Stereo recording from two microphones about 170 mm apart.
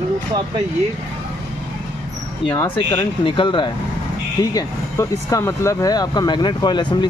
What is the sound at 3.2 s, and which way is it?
Speech, 30° left (ahead or behind).